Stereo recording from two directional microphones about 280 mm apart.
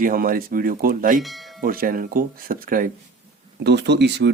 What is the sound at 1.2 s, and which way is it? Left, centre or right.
Speech, centre.